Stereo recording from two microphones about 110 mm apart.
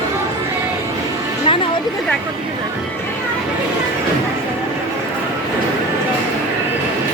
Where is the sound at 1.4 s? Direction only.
50° left (ahead or behind).